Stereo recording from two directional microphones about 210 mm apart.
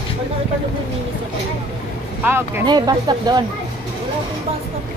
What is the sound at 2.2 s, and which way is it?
Speech, 10° right (ahead or behind).